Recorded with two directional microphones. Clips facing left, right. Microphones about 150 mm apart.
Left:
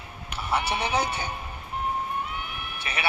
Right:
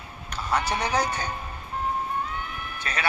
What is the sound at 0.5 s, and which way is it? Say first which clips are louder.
Speech: right 1 dB; 25° left (ahead or behind).